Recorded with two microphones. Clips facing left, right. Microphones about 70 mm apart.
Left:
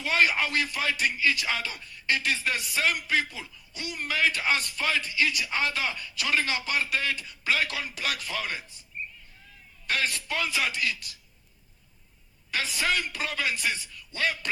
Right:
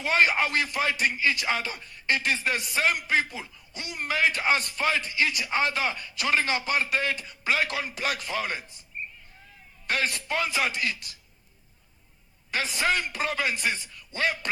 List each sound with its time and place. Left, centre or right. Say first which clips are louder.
0.0 s speech: right 2 dB; right
9.8 s speech: right 1 dB; right
12.5 s speech: right 2 dB; right